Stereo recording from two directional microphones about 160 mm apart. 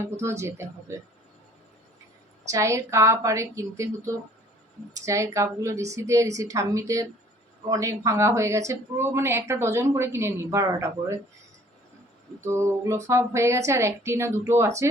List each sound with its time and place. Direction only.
0.0 s speech: 15° right (ahead or behind)
2.5 s a woman's voice: 20° right (ahead or behind)
12.5 s speech: 15° right (ahead or behind)